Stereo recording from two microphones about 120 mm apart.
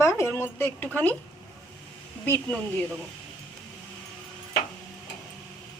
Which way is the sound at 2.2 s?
15° left (ahead or behind).